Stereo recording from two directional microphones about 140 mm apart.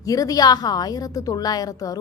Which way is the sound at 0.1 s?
25° left (ahead or behind).